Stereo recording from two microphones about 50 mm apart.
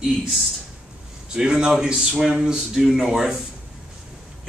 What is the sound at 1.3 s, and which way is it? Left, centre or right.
Speech, centre.